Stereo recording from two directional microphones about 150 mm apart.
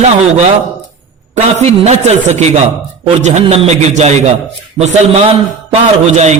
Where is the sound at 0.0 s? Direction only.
45° right (ahead or behind).